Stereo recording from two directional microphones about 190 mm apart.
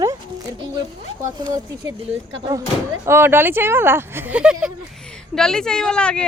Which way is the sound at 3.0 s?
10° right (ahead or behind).